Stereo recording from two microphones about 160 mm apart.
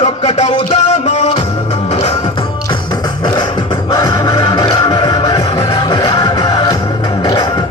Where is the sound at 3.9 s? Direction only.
25° left (ahead or behind).